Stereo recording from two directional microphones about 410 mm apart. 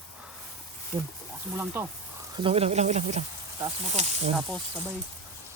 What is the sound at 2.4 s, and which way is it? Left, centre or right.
Speech, centre.